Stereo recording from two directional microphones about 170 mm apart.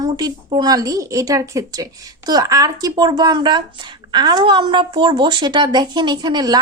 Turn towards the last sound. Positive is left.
turn(degrees=-25)  # may be behind; listen again after turning